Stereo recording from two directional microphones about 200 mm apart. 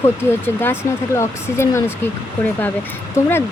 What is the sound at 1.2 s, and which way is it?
Speech, 15° left (ahead or behind).